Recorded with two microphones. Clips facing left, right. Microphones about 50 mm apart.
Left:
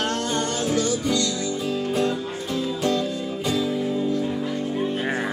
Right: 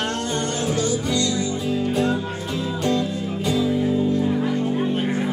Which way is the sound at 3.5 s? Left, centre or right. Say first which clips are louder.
Right 4 dB; centre.